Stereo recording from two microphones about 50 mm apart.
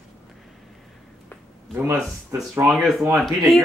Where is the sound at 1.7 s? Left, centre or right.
Right.